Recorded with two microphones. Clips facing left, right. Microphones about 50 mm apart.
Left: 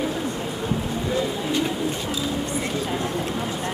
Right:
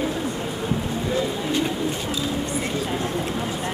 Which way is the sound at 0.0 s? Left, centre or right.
Centre.